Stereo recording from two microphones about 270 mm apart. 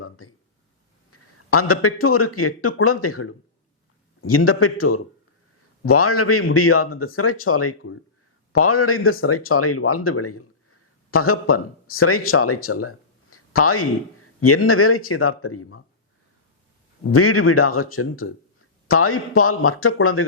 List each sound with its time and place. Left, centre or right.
0.0 s a sound: left
1.1 s speech: left
17.1 s speech: left